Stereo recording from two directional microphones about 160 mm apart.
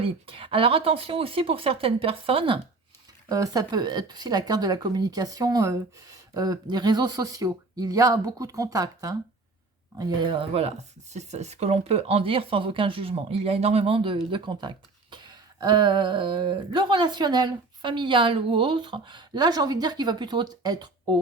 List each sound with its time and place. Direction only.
0.0 s speech: 35° right (ahead or behind)
3.2 s speech: 20° right (ahead or behind)
10.0 s speech: 30° right (ahead or behind)